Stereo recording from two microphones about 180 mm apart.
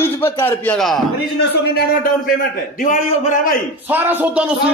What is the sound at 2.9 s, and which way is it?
Speech, 50° left (ahead or behind).